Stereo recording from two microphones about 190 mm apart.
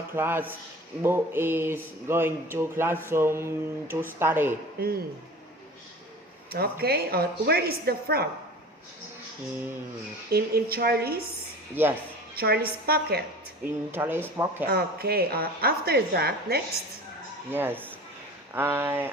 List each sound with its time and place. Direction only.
0.2 s speech: 10° right (ahead or behind)
4.8 s a woman's voice: 50° right (ahead or behind)
6.5 s a woman's voice: 55° right (ahead or behind)
10.2 s a woman's voice: 55° right (ahead or behind)
11.7 s speech: 10° right (ahead or behind)
12.3 s a woman's voice: 55° right (ahead or behind)
13.9 s speech: 10° right (ahead or behind)
14.7 s a woman's voice: 55° right (ahead or behind)
17.5 s speech: 10° right (ahead or behind)